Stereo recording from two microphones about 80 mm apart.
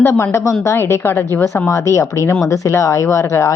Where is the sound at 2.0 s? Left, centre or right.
Left.